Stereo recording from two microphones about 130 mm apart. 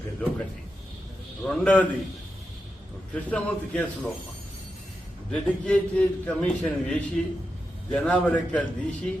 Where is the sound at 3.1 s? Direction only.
10° left (ahead or behind).